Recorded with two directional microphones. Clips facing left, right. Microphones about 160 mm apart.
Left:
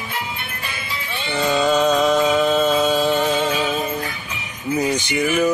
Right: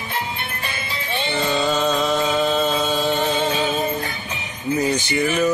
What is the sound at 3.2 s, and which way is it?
Music, 25° right (ahead or behind).